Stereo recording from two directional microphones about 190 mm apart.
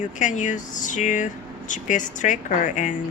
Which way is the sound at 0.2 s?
40° left (ahead or behind).